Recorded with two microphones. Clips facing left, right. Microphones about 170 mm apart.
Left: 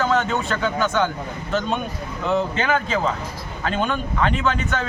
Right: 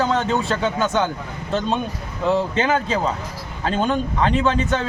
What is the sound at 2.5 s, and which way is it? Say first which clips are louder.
Speech: right 2 dB; 30° right (ahead or behind).